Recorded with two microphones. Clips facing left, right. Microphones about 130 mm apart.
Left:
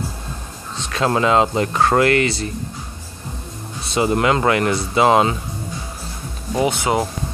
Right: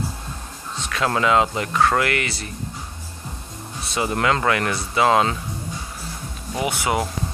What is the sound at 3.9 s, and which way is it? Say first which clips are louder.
Speech: left 4 dB; 25° left (ahead or behind).